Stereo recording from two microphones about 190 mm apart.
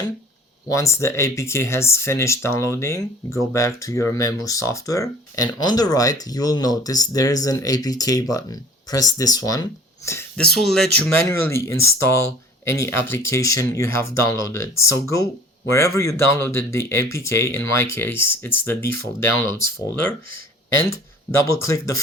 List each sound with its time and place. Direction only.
0.7 s speech: 15° left (ahead or behind)
10.1 s speech: 10° left (ahead or behind)
11.3 s speech: 15° left (ahead or behind)
21.4 s speech: 15° left (ahead or behind)